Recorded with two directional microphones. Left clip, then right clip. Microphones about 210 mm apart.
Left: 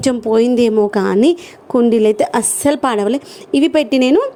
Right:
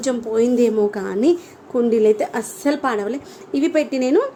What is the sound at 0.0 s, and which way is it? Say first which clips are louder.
Speech: left 5 dB; 35° left (ahead or behind).